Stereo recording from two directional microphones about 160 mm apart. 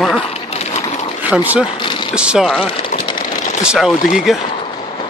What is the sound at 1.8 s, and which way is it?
Vehicle, 30° left (ahead or behind).